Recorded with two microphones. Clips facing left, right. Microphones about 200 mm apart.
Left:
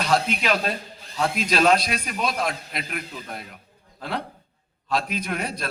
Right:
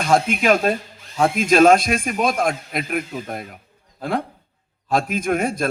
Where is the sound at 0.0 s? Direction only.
50° right (ahead or behind).